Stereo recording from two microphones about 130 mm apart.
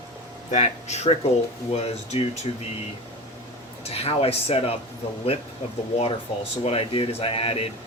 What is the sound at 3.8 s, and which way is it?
Speech, 50° left (ahead or behind).